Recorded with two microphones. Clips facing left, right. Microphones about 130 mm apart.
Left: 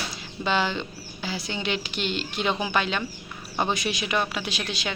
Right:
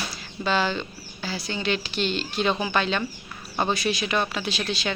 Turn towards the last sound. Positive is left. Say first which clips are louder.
# right 3 dB
turn(degrees=15)  # may be behind; listen again after turning